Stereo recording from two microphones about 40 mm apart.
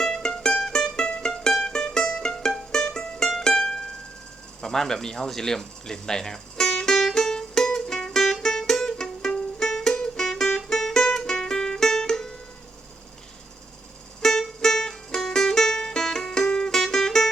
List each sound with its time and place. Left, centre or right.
0.0 s music: centre
4.6 s a sound: centre
9.3 s music: centre
14.2 s music: centre